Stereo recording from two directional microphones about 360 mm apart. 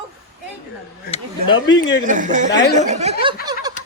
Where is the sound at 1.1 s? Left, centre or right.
Centre.